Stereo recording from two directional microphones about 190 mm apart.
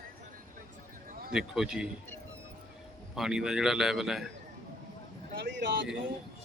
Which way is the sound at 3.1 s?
5° right (ahead or behind).